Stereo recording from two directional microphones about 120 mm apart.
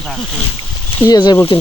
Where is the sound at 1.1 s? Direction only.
35° left (ahead or behind).